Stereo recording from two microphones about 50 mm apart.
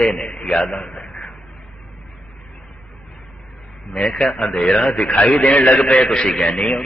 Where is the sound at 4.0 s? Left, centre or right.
Centre.